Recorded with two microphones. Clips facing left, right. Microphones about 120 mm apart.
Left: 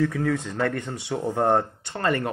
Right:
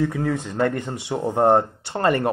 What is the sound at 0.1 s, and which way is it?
Speech, 25° right (ahead or behind).